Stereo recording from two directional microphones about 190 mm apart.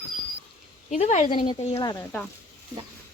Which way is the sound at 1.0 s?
40° left (ahead or behind).